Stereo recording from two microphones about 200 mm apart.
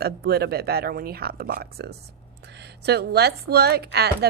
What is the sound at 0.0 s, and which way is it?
A woman's voice, 50° right (ahead or behind).